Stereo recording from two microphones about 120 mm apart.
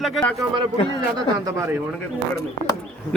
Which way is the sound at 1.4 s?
30° right (ahead or behind).